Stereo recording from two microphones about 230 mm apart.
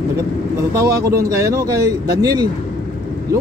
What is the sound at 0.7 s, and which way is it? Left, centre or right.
A man's voice, centre.